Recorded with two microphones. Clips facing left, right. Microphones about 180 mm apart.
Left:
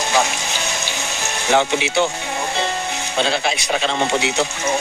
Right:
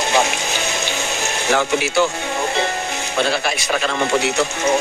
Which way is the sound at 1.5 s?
20° left (ahead or behind).